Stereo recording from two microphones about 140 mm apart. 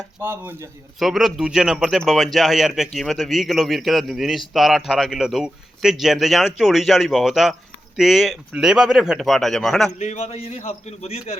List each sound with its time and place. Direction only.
0.2 s speech: 15° right (ahead or behind)
0.9 s a man's voice: centre (ahead or behind)
10.0 s a man's voice: 55° left (ahead or behind)